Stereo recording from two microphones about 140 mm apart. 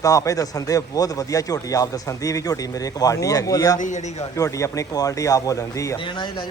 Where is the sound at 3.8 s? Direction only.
60° left (ahead or behind).